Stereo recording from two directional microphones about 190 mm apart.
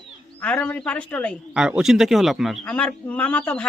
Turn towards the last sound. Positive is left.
turn(degrees=5)  # may be behind; listen again after turning